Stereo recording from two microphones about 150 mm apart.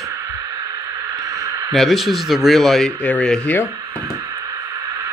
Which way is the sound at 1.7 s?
Centre (ahead or behind).